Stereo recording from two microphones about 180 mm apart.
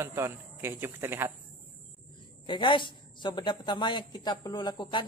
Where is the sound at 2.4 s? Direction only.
25° left (ahead or behind).